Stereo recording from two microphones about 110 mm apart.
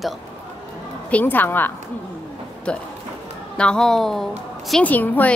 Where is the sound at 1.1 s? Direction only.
15° left (ahead or behind).